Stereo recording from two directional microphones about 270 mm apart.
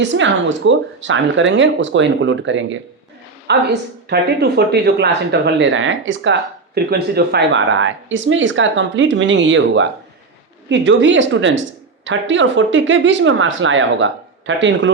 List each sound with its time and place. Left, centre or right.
0.0 s speech: right